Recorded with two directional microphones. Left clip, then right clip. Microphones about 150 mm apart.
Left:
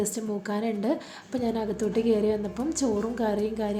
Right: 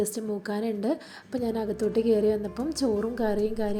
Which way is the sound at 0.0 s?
25° right (ahead or behind).